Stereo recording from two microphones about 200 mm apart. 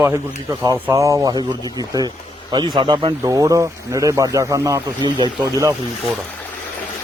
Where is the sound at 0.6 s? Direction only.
15° right (ahead or behind).